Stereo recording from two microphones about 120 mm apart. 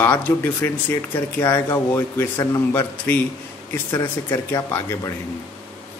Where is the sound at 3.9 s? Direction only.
30° left (ahead or behind).